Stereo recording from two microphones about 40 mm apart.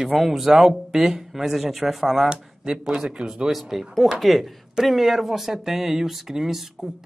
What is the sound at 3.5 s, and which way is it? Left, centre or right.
Speech, centre.